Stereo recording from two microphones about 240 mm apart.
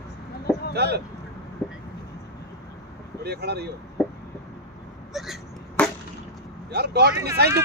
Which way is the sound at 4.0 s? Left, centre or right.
Centre.